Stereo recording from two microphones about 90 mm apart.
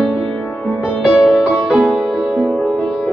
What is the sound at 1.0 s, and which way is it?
Music, 5° right (ahead or behind).